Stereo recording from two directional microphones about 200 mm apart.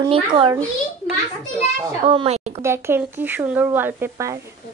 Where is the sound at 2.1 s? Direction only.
30° right (ahead or behind).